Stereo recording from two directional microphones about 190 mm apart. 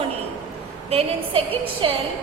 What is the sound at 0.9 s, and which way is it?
Speech, 30° right (ahead or behind).